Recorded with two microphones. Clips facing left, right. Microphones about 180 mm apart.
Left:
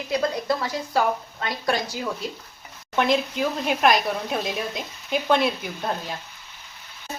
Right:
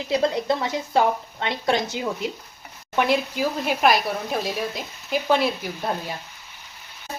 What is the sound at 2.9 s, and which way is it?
Speech, 10° right (ahead or behind).